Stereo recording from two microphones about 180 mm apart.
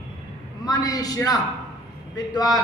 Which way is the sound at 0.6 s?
20° left (ahead or behind).